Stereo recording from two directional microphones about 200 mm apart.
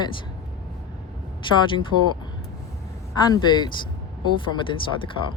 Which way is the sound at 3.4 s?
20° left (ahead or behind).